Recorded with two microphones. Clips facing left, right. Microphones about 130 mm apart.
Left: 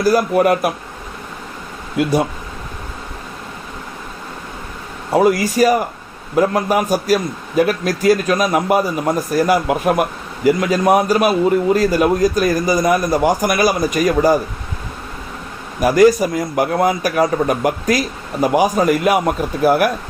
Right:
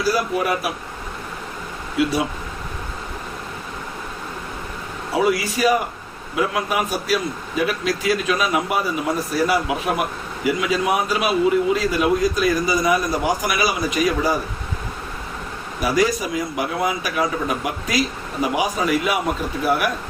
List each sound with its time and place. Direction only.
0.0 s a man's voice: 50° left (ahead or behind)
2.0 s a man's voice: 50° left (ahead or behind)
5.1 s a man's voice: 45° left (ahead or behind)
15.8 s a man's voice: 45° left (ahead or behind)